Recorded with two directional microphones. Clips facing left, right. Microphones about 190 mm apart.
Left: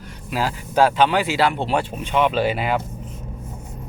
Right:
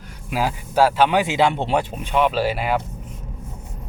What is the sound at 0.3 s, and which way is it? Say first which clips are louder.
Speech: right 1 dB; 15° right (ahead or behind).